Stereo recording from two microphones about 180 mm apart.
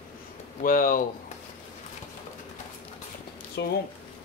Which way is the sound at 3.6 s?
70° left (ahead or behind).